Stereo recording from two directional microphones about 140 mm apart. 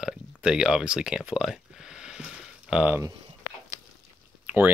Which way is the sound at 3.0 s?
25° right (ahead or behind).